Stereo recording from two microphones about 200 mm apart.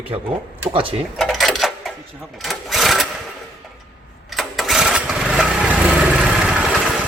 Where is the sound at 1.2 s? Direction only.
Centre (ahead or behind).